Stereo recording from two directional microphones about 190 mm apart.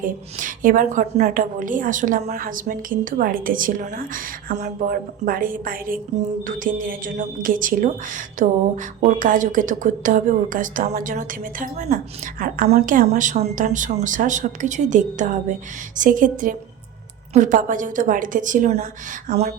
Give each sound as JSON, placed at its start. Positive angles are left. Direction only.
{"t": 0.0, "sound": "speech", "side_deg": -45}